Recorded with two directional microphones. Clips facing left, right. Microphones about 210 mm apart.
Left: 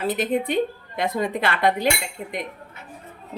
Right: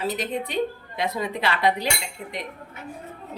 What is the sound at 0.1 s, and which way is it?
A woman's voice, 55° left (ahead or behind).